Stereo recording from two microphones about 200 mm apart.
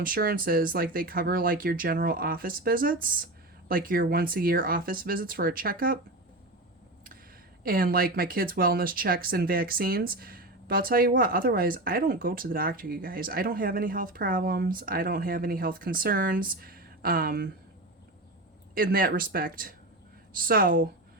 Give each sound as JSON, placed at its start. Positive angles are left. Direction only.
{"t": 0.0, "sound": "speech", "side_deg": -45}
{"t": 7.6, "sound": "speech", "side_deg": -45}
{"t": 18.7, "sound": "speech", "side_deg": -45}